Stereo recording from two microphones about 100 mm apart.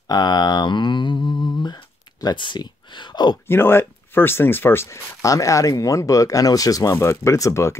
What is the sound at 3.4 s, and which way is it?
Speech, 25° left (ahead or behind).